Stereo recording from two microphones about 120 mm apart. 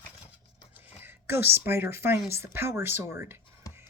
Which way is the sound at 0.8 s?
15° right (ahead or behind).